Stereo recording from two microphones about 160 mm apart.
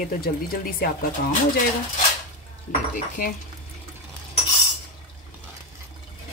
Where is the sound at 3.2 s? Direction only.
60° left (ahead or behind).